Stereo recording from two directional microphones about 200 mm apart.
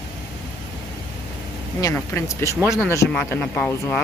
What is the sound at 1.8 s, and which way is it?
Speech, 15° left (ahead or behind).